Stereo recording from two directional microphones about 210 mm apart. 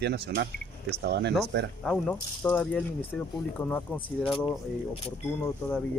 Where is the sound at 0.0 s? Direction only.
50° right (ahead or behind).